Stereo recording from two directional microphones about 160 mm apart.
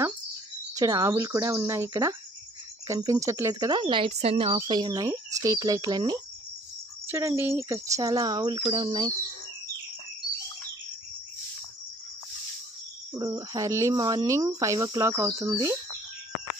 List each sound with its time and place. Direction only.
0.7 s speech: 20° right (ahead or behind)
13.2 s speech: 25° right (ahead or behind)